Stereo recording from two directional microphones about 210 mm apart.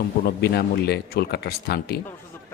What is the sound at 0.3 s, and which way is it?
Speech, 50° left (ahead or behind).